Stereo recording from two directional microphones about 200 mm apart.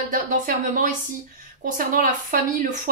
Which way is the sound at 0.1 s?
40° right (ahead or behind).